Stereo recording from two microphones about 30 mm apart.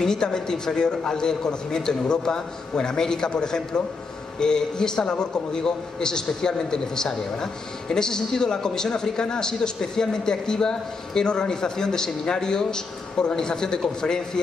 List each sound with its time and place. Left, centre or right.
0.0 s a man's voice: left